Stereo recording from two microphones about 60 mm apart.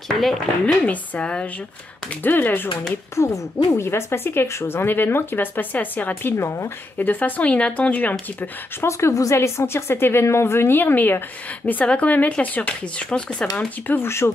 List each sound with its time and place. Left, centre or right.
0.2 s speech: centre
0.8 s speech: left
2.2 s speech: left
3.2 s speech: left
6.3 s speech: left
7.0 s speech: left
8.8 s speech: left
11.8 s speech: centre
13.8 s speech: left